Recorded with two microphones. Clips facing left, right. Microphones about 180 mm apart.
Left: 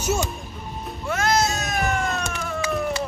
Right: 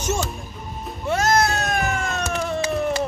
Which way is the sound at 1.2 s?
55° right (ahead or behind).